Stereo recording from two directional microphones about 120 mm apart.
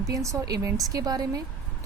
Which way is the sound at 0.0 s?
30° right (ahead or behind).